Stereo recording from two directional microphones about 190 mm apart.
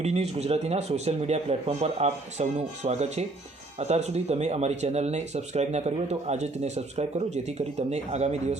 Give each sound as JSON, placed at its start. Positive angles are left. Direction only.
{"t": 0.0, "sound": "speech", "side_deg": -35}